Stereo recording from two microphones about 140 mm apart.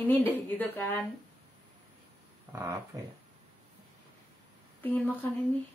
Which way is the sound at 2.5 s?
20° right (ahead or behind).